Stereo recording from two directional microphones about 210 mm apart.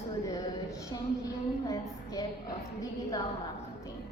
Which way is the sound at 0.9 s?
20° left (ahead or behind).